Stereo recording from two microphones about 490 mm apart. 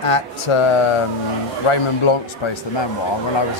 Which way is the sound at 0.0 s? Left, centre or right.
Left.